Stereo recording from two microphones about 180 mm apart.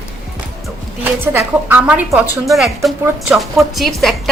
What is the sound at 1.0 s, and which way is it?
A woman's voice, 10° right (ahead or behind).